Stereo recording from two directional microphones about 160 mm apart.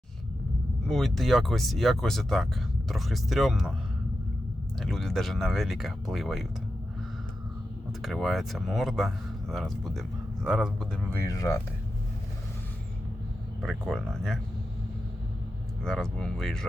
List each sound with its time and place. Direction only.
0.9 s speech: centre (ahead or behind)
4.8 s speech: centre (ahead or behind)
8.0 s speech: centre (ahead or behind)
11.1 s speech: 20° left (ahead or behind)
13.6 s speech: centre (ahead or behind)
15.8 s speech: 5° left (ahead or behind)